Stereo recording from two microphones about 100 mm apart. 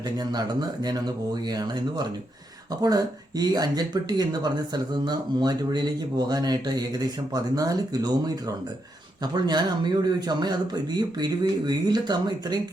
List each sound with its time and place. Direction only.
0.2 s speech: 40° right (ahead or behind)